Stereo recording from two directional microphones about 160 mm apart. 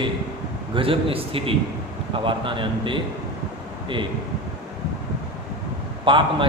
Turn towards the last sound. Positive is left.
turn(degrees=-30)  # may be behind; listen again after turning